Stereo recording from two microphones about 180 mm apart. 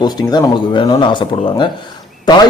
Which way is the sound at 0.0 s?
25° left (ahead or behind).